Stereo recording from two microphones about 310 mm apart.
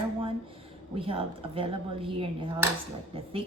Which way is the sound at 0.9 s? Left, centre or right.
Centre.